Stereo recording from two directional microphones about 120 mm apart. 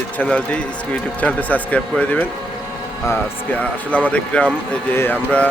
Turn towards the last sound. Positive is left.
turn(degrees=15)  # may be behind; listen again after turning